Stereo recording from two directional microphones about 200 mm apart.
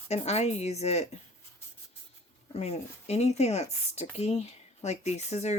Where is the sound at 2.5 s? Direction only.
30° left (ahead or behind).